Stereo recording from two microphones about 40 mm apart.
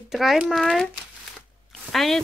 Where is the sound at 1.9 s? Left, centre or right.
Centre.